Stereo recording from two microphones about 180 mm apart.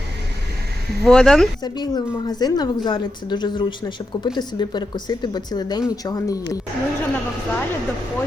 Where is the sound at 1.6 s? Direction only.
20° left (ahead or behind).